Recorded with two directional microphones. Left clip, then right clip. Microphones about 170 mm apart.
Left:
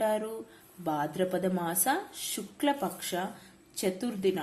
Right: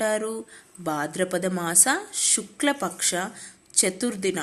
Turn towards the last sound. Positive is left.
turn(degrees=-20)  # may be behind; listen again after turning